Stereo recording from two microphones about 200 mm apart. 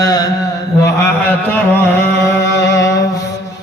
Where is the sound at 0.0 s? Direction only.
20° left (ahead or behind).